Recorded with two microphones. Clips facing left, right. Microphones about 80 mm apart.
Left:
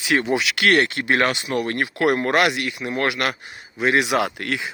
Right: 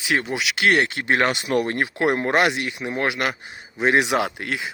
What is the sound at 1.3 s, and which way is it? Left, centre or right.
Speech, right.